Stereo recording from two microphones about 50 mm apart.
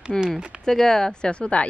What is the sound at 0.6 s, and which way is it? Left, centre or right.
Speech, centre.